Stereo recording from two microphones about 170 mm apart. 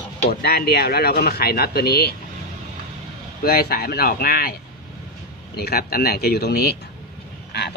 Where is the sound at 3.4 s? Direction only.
65° left (ahead or behind).